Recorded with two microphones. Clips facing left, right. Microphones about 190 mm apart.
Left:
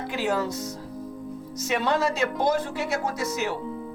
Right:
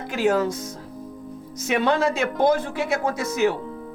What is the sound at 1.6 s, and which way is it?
A woman's voice, 55° right (ahead or behind).